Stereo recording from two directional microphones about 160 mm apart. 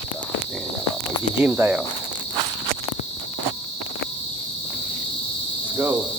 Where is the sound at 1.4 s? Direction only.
10° right (ahead or behind).